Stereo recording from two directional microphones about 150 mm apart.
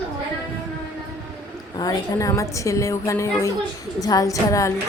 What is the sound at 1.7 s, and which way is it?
A woman's voice, 25° left (ahead or behind).